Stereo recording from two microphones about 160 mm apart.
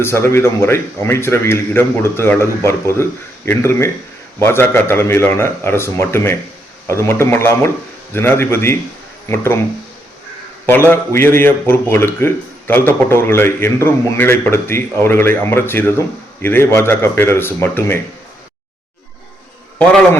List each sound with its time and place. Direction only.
0.0 s speech: 15° left (ahead or behind)
10.7 s speech: 15° left (ahead or behind)